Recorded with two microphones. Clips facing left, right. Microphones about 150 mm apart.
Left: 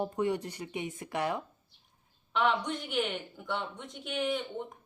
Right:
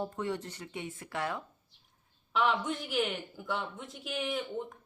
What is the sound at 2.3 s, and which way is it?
A man's voice, 5° right (ahead or behind).